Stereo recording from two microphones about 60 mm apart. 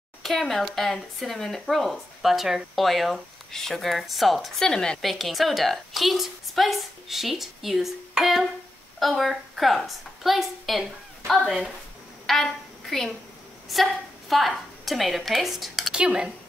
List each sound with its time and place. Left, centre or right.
0.2 s speech: centre
4.6 s a woman's voice: centre
5.0 s speech: centre
8.2 s music: centre
9.0 s a woman's voice: centre
13.7 s a woman's voice: centre
15.9 s speech: centre